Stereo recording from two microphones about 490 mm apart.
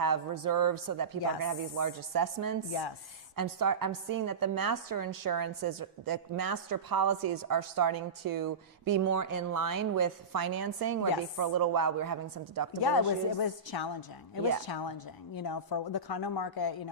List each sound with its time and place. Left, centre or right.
0.0 s a woman's voice: right
13.4 s a woman's voice: left